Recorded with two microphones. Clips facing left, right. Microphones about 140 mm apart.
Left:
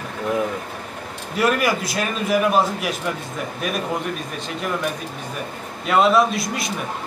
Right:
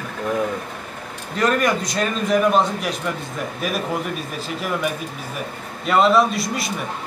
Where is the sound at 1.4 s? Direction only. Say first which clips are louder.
Even; 5° left (ahead or behind).